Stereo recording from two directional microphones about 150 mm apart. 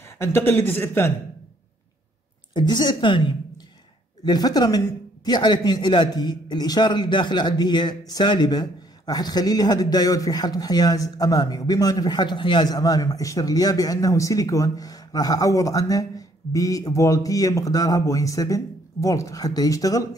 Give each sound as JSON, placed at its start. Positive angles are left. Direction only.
{"t": 0.2, "sound": "speech", "side_deg": 15}
{"t": 2.5, "sound": "a man's voice", "side_deg": 30}